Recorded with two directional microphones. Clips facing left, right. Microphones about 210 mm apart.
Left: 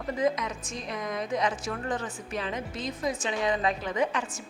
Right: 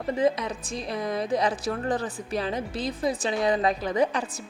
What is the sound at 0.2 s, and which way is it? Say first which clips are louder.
A woman's voice: right 3 dB; 30° right (ahead or behind).